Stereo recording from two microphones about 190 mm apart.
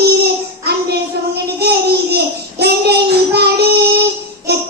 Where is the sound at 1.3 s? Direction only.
55° right (ahead or behind).